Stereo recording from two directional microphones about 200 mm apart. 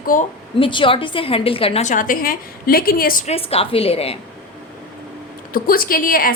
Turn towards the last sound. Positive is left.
turn(degrees=45)  # may be behind; listen again after turning